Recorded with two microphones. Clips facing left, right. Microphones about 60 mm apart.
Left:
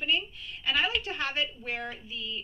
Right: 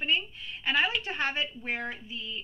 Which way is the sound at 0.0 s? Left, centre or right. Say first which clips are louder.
Even; right.